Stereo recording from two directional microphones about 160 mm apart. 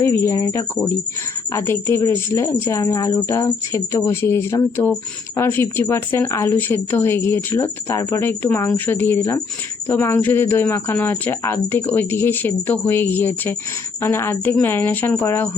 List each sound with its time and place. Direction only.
0.0 s a woman's voice: 15° left (ahead or behind)